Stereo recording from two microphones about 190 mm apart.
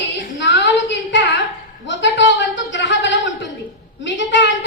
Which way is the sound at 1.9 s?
70° left (ahead or behind).